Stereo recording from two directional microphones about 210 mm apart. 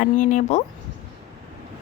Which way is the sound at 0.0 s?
40° left (ahead or behind).